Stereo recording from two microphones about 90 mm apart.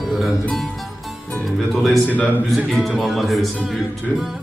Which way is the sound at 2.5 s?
Centre (ahead or behind).